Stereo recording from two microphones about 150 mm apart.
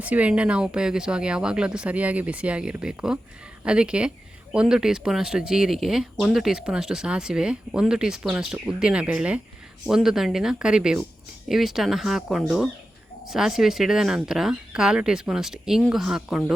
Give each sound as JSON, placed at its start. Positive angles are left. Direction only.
{"t": 0.0, "sound": "speech", "side_deg": -10}